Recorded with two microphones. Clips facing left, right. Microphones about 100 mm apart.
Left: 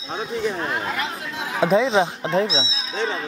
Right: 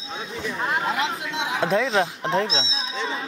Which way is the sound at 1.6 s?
15° left (ahead or behind).